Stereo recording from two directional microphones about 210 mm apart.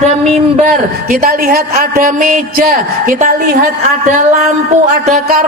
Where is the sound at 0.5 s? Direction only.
35° right (ahead or behind).